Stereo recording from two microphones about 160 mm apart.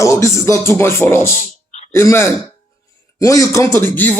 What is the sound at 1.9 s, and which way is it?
Speech, 15° left (ahead or behind).